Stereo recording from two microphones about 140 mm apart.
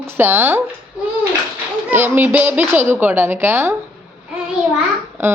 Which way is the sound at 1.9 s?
15° right (ahead or behind).